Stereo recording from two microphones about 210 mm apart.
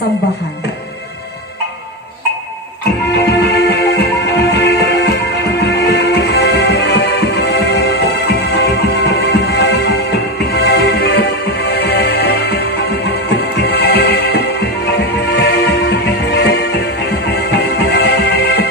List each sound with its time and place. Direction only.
3.2 s music: 50° left (ahead or behind)